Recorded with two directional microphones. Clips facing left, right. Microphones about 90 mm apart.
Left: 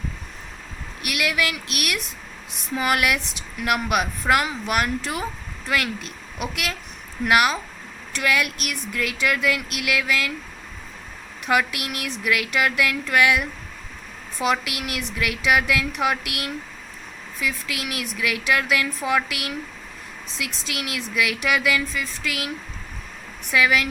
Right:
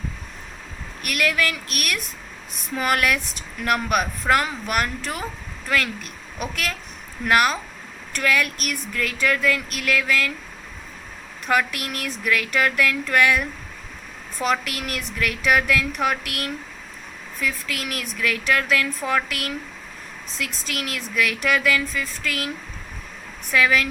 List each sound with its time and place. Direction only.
1.0 s speech: 10° left (ahead or behind)
11.4 s speech: 15° left (ahead or behind)